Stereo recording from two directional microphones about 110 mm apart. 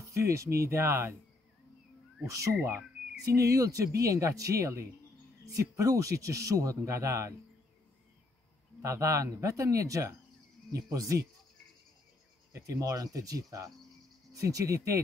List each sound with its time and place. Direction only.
0.2 s speech: 25° right (ahead or behind)
2.2 s speech: 30° right (ahead or behind)
8.8 s speech: 30° right (ahead or behind)
12.5 s speech: 30° right (ahead or behind)